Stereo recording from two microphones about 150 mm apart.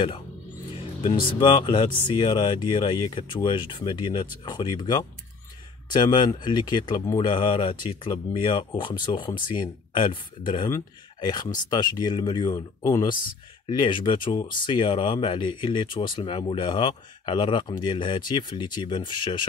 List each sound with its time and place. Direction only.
0.7 s speech: 35° left (ahead or behind)